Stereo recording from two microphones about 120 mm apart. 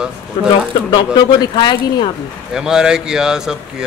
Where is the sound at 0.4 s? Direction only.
40° left (ahead or behind).